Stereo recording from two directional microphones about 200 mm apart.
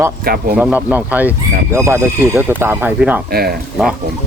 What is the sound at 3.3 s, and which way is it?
Speech, 50° right (ahead or behind).